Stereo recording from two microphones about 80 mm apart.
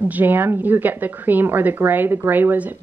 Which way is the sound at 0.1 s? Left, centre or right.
Right.